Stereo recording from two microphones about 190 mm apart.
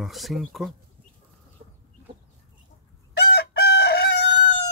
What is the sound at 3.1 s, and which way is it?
Chicken, 60° left (ahead or behind).